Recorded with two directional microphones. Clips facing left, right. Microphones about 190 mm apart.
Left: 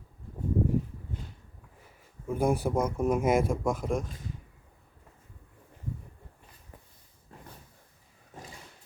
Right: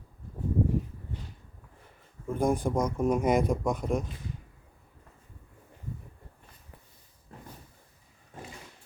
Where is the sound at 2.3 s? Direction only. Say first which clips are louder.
Even; 5° left (ahead or behind).